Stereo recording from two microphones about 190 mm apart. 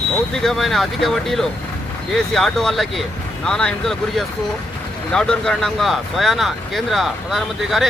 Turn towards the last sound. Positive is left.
turn(degrees=0)  # may be behind; listen again after turning